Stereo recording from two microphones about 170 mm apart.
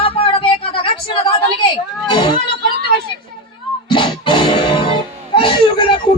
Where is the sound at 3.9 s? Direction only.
30° left (ahead or behind).